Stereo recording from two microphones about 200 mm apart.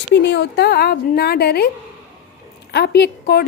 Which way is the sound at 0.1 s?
60° left (ahead or behind).